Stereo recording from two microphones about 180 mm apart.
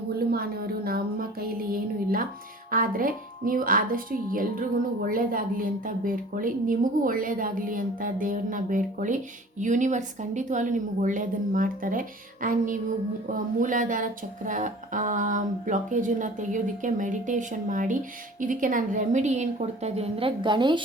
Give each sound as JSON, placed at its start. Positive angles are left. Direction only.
{"t": 0.2, "sound": "speech", "side_deg": -55}
{"t": 2.6, "sound": "a woman's voice", "side_deg": -50}